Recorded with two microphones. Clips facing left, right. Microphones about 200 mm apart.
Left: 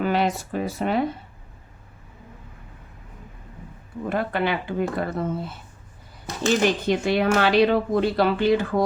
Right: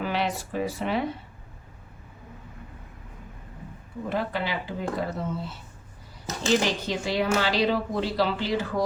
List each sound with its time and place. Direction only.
0.0 s speech: 45° left (ahead or behind)
4.1 s speech: 55° left (ahead or behind)